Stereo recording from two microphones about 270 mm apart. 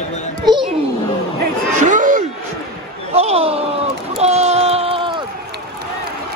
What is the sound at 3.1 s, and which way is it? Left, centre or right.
Speech, right.